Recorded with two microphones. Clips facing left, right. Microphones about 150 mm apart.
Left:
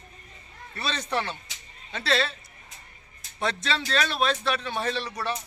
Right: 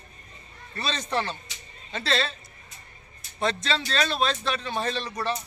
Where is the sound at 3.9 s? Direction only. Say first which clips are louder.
Left 1 dB; 10° left (ahead or behind).